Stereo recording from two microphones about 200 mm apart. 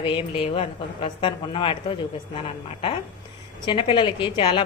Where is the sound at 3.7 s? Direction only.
25° left (ahead or behind).